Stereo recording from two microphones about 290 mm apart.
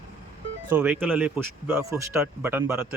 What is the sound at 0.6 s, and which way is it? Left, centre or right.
Speech, centre.